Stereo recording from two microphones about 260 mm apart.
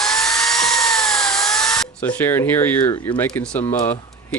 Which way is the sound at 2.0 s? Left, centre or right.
Centre.